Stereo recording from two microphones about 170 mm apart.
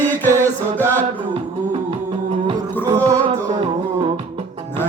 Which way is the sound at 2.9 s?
20° right (ahead or behind).